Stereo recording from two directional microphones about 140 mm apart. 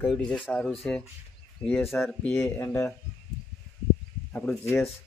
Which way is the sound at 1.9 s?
15° left (ahead or behind).